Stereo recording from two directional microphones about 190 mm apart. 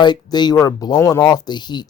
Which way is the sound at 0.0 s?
20° left (ahead or behind).